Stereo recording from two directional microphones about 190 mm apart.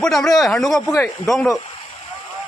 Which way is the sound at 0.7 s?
20° left (ahead or behind).